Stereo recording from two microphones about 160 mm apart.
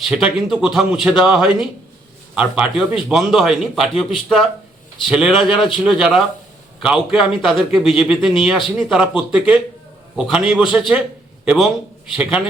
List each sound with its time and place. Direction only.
0.1 s a man's voice: 5° right (ahead or behind)